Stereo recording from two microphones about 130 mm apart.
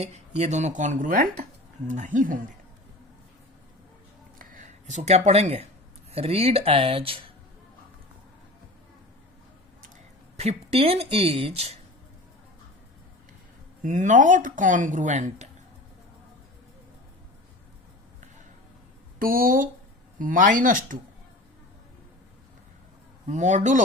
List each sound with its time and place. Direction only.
0.0 s speech: 60° right (ahead or behind); by 1.5 s 90° right
1.9 s speech: 70° right (ahead or behind); by 2.4 s 90° right
4.4 s a sound: 80° right; by 5.6 s 50° right (ahead or behind)
6.1 s speech: 50° right (ahead or behind)
10.3 s speech: 50° right (ahead or behind)
13.8 s speech: 70° right (ahead or behind)
19.2 s speech: 90° right
23.2 s speech: 65° right (ahead or behind)